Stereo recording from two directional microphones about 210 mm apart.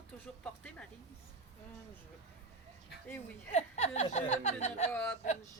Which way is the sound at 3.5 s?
35° left (ahead or behind).